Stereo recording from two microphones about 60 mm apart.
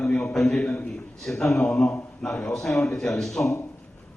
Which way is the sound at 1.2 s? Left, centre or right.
Centre.